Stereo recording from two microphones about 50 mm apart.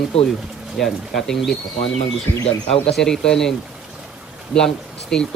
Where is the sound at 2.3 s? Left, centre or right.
Left.